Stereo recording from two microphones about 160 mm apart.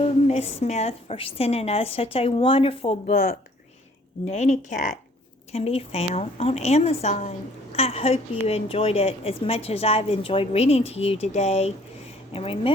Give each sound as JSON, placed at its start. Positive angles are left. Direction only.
{"t": 0.0, "sound": "a woman's voice", "side_deg": 40}
{"t": 5.5, "sound": "a woman's voice", "side_deg": 40}